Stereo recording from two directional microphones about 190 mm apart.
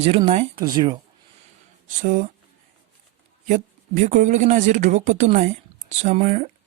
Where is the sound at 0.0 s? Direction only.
30° right (ahead or behind).